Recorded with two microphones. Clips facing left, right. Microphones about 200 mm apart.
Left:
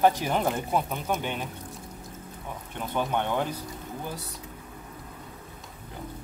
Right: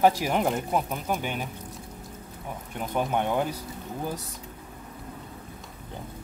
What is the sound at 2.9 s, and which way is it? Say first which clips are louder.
Speech: right 2 dB; 10° right (ahead or behind).